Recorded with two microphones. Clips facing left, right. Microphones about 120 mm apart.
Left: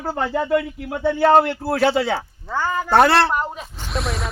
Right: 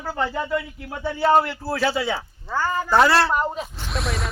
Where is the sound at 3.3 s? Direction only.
5° left (ahead or behind).